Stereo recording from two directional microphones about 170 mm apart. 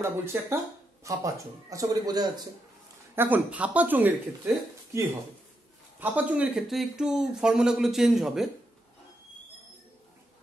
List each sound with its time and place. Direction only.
0.0 s speech: 15° right (ahead or behind)
3.2 s speech: 10° right (ahead or behind)
5.9 s speech: 10° right (ahead or behind)